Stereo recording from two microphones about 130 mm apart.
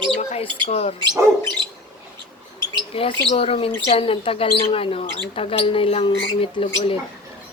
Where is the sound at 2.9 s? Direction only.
50° left (ahead or behind).